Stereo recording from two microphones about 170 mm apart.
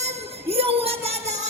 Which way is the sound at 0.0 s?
40° right (ahead or behind).